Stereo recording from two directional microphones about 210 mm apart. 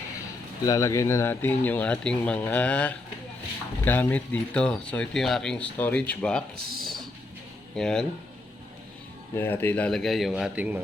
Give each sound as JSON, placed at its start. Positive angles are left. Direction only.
{"t": 0.6, "sound": "speech", "side_deg": 15}
{"t": 6.6, "sound": "speech", "side_deg": -45}
{"t": 7.8, "sound": "speech", "side_deg": 5}
{"t": 9.3, "sound": "speech", "side_deg": 10}